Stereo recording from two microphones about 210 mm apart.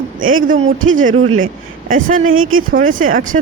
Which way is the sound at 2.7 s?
40° right (ahead or behind).